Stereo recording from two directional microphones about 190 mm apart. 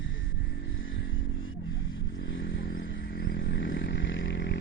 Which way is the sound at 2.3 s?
90° left.